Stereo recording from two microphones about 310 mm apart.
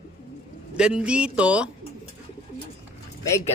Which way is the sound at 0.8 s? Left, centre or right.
Centre.